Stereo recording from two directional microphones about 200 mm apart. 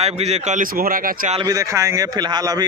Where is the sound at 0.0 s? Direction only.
30° right (ahead or behind).